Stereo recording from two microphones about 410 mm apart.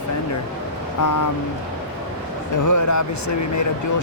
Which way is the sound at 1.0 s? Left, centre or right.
Left.